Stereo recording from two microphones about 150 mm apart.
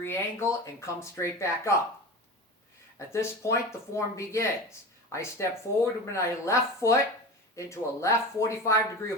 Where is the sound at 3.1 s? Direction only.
20° left (ahead or behind).